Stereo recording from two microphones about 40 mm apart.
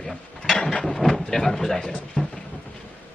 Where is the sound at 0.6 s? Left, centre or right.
Left.